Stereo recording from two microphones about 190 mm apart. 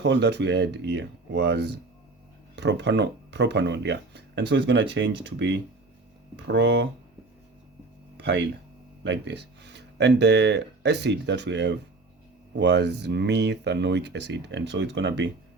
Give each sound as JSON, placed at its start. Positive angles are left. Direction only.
{"t": 0.0, "sound": "speech", "side_deg": -65}
{"t": 8.2, "sound": "speech", "side_deg": -70}